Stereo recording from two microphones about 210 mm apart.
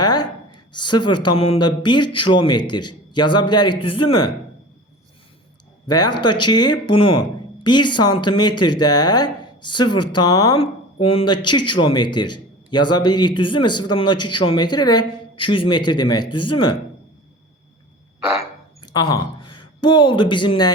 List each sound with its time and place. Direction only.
0.0 s speech: 20° left (ahead or behind)
5.9 s speech: 20° left (ahead or behind)
18.9 s a woman's voice: 20° left (ahead or behind)